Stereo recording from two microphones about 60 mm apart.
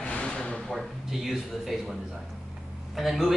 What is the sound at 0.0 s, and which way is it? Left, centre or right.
Drawer open or close, centre.